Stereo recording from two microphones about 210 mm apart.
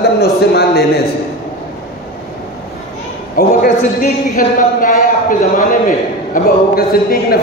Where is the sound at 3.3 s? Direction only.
45° left (ahead or behind).